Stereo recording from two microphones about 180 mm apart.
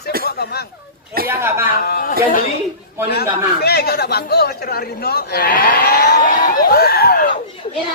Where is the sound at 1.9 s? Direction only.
50° left (ahead or behind).